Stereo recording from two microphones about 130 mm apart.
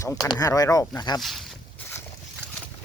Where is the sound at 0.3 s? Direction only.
30° left (ahead or behind).